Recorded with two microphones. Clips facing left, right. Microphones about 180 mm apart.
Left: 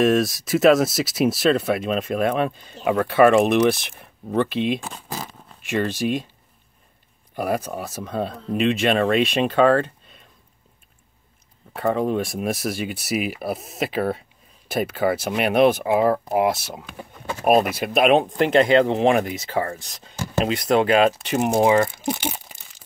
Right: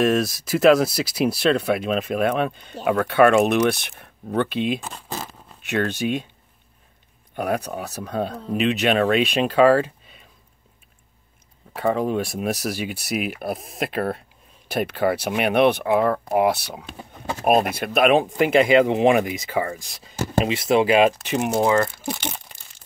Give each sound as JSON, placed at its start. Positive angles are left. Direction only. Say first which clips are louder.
{"t": 0.0, "sound": "speech", "louder": "left 2 dB", "side_deg": 0}
{"t": 7.3, "sound": "speech", "louder": "even", "side_deg": 0}
{"t": 11.7, "sound": "speech", "louder": "even", "side_deg": 0}
{"t": 21.1, "sound": "speech", "louder": "left 2 dB", "side_deg": 0}
{"t": 21.5, "sound": "speech", "louder": "left 2 dB", "side_deg": 20}
{"t": 22.1, "sound": "a sound", "louder": "left 3 dB", "side_deg": 10}